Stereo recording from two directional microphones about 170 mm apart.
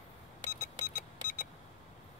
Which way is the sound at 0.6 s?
60° left (ahead or behind).